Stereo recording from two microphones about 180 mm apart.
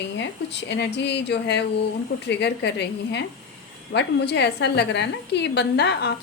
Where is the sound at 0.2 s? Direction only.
75° left (ahead or behind).